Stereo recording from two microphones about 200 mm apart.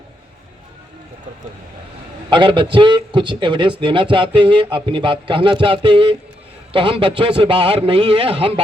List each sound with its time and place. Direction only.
2.3 s a man's voice: 25° right (ahead or behind)